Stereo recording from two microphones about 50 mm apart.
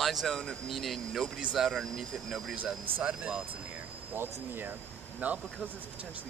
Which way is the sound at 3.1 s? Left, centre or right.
Centre.